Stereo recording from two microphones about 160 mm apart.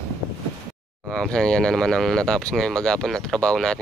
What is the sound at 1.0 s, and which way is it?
Speech, 5° left (ahead or behind).